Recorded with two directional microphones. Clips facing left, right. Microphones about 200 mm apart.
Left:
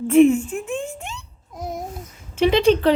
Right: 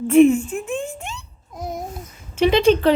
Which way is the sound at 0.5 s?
5° right (ahead or behind).